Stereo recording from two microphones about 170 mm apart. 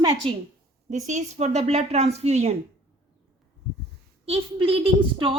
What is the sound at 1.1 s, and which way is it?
A woman's voice, 40° right (ahead or behind).